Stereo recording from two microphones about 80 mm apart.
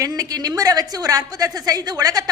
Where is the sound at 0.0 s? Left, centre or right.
Right.